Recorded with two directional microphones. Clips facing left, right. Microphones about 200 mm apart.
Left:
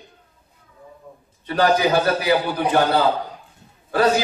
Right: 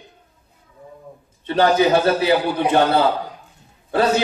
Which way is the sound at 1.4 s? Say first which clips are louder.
Right 2 dB; 25° right (ahead or behind).